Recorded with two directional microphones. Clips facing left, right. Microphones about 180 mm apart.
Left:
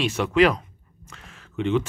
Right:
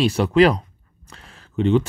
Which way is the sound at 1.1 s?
35° right (ahead or behind).